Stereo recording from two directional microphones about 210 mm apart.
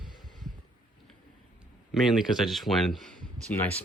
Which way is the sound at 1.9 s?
Centre (ahead or behind).